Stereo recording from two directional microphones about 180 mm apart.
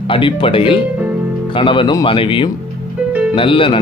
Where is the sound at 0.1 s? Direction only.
30° left (ahead or behind).